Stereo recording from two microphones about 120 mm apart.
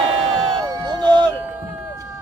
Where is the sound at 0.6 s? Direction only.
30° right (ahead or behind).